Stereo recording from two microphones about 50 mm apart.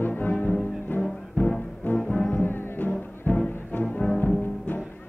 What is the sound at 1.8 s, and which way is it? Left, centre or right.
Brass instrument, left.